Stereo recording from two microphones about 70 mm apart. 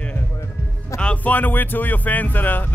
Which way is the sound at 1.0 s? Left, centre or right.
Left.